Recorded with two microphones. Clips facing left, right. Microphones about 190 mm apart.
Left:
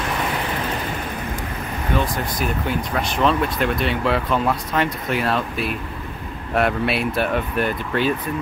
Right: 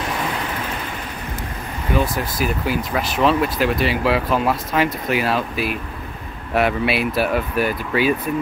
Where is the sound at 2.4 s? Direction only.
5° right (ahead or behind).